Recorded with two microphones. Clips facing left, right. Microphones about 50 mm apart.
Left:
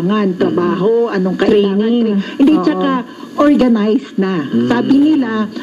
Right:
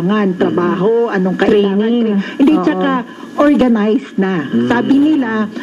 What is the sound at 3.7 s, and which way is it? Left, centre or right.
Speech, right.